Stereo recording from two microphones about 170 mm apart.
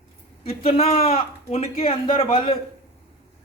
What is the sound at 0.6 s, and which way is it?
A man's voice, 35° left (ahead or behind).